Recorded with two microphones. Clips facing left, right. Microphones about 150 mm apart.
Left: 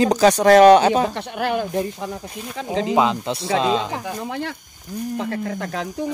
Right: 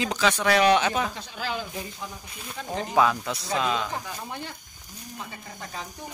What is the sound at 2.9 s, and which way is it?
Speech, 20° left (ahead or behind).